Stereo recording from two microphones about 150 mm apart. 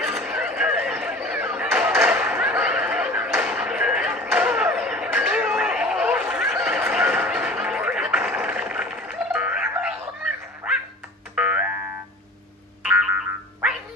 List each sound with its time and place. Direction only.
0.0 s a sound: centre (ahead or behind)
8.4 s music: 5° right (ahead or behind)
10.6 s dog: 5° right (ahead or behind)
11.3 s music: 10° right (ahead or behind)